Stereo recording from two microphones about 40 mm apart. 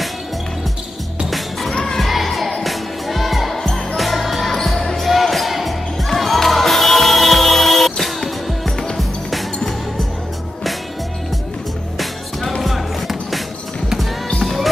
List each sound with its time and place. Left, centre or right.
1.7 s music: centre
2.0 s children shouting: centre
2.6 s music: centre
3.5 s basketball bounce: centre
5.1 s music: centre
12.0 s music: centre
14.4 s music: centre